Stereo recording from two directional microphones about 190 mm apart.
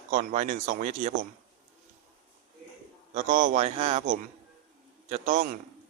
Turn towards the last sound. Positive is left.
turn(degrees=-40)  # may be behind; listen again after turning